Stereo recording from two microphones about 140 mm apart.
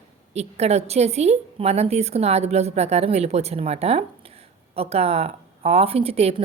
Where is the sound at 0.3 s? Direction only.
50° right (ahead or behind).